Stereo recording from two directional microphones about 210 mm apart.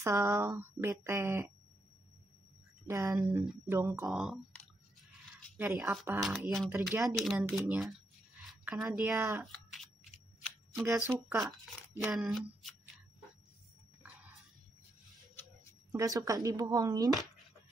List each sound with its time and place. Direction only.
0.0 s speech: 15° right (ahead or behind)
2.9 s speech: 15° right (ahead or behind)
4.2 s speech: centre (ahead or behind)
9.5 s a sound: centre (ahead or behind)
10.9 s speech: 10° right (ahead or behind)
15.9 s speech: 15° right (ahead or behind)